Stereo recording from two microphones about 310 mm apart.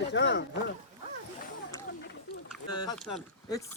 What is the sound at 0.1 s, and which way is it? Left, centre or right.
Speech, left.